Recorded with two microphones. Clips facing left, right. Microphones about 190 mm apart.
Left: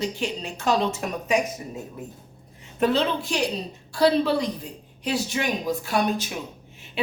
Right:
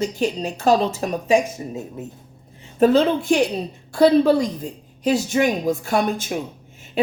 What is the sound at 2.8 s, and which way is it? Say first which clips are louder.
Speech: right 7 dB; 45° right (ahead or behind).